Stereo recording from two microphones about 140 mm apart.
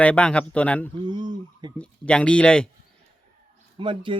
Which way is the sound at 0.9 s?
35° right (ahead or behind).